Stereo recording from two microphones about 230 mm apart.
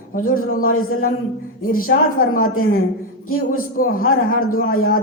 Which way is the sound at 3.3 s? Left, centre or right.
Left.